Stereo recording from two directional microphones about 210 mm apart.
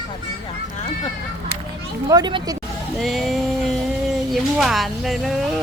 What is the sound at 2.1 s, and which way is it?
Speech, 20° right (ahead or behind).